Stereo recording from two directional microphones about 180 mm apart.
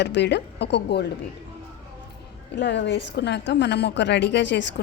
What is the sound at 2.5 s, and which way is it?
A woman's voice, 75° left (ahead or behind).